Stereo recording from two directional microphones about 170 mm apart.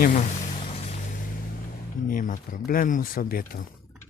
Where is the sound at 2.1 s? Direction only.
55° left (ahead or behind).